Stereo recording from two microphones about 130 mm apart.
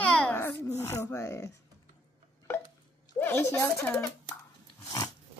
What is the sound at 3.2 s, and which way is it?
Speech, 15° left (ahead or behind).